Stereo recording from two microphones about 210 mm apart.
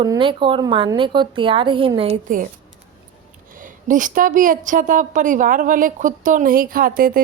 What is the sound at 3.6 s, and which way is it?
A woman's voice, 40° right (ahead or behind).